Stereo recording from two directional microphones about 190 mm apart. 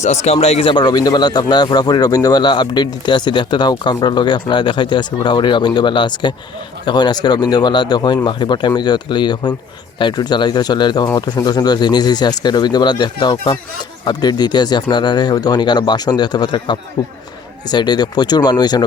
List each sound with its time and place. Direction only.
0.0 s speech: 35° left (ahead or behind); by 18.8 s 20° left (ahead or behind)